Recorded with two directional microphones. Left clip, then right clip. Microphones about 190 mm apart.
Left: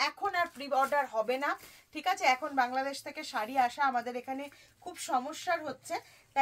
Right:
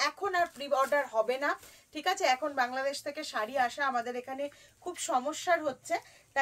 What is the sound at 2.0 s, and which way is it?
Speech, 20° right (ahead or behind).